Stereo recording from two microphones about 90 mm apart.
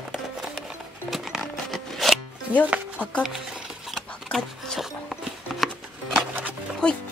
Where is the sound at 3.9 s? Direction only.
Centre (ahead or behind).